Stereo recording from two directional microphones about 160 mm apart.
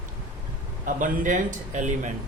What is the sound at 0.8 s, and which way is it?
A man's voice, 55° right (ahead or behind).